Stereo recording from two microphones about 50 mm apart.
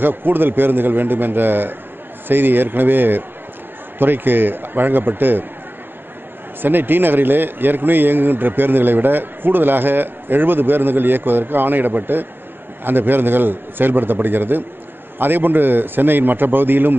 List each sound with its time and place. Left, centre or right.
0.0 s a man's voice: right
6.6 s a man's voice: right